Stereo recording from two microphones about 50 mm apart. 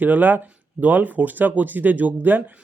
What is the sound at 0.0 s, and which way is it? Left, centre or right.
Speech, right.